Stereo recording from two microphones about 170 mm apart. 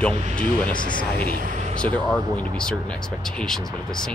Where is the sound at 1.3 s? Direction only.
45° right (ahead or behind).